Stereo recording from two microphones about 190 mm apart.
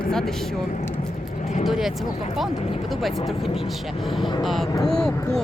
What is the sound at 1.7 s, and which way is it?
Speech, centre (ahead or behind).